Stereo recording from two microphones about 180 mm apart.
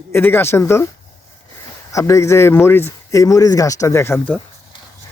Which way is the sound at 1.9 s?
15° left (ahead or behind).